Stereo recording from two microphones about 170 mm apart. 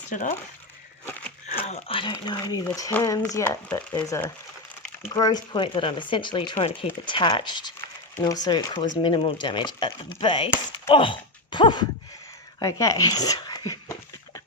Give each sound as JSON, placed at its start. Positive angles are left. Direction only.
{"t": 0.1, "sound": "speech", "side_deg": 45}
{"t": 1.5, "sound": "speech", "side_deg": 35}